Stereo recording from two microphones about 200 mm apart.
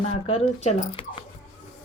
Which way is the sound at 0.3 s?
30° left (ahead or behind).